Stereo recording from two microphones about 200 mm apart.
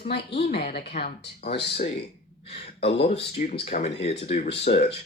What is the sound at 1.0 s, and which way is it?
Speech, 30° left (ahead or behind).